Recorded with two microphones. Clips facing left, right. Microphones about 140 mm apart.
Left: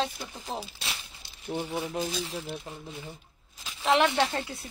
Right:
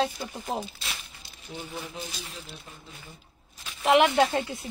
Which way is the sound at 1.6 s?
40° left (ahead or behind).